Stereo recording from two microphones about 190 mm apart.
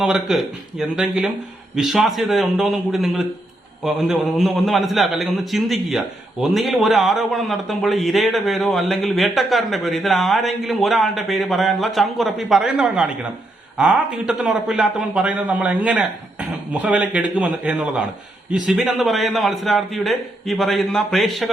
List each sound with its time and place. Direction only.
0.0 s a man's voice: centre (ahead or behind)